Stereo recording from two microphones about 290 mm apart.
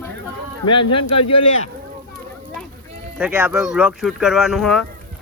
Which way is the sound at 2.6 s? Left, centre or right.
Centre.